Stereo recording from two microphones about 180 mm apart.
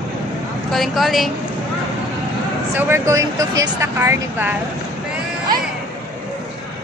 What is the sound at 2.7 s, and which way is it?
Speech, 15° right (ahead or behind).